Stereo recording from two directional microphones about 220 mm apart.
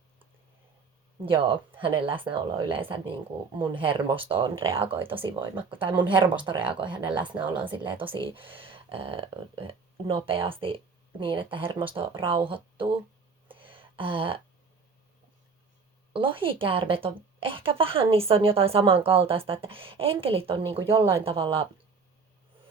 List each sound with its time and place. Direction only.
1.2 s a woman's voice: 25° right (ahead or behind)
13.5 s a sound: 25° right (ahead or behind)
16.1 s a woman's voice: 25° right (ahead or behind)